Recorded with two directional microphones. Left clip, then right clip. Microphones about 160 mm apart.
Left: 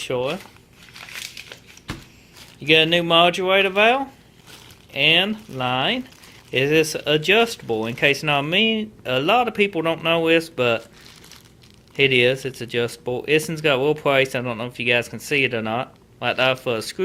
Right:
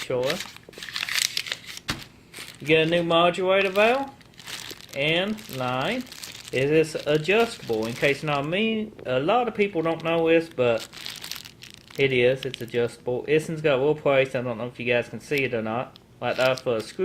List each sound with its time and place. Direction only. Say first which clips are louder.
0.1 s speech: left 1 dB; 25° left (ahead or behind)
2.6 s speech: left 4 dB; 25° left (ahead or behind)
11.9 s speech: left 4 dB; 25° left (ahead or behind)